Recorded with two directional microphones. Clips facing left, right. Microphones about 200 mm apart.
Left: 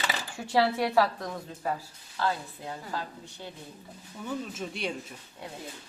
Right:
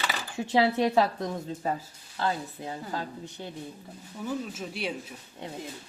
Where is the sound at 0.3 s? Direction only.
20° right (ahead or behind).